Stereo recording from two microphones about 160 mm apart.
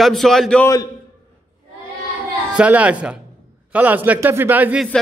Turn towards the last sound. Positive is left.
turn(degrees=-10)  # may be behind; listen again after turning